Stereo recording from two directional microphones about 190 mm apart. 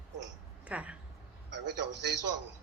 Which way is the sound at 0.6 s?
5° right (ahead or behind).